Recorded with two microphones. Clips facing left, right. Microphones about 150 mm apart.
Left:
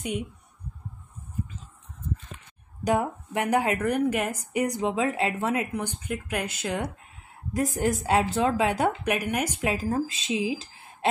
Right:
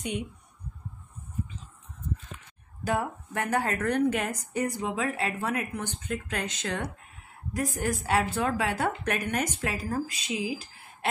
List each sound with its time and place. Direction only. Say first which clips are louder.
2.8 s speech: left 4 dB; 15° left (ahead or behind)
7.5 s a woman's voice: left 4 dB; 20° left (ahead or behind)